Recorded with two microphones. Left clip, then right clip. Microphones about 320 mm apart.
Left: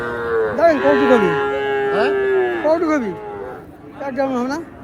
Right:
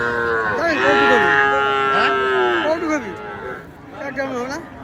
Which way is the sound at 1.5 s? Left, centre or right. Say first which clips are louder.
Right 2 dB; centre.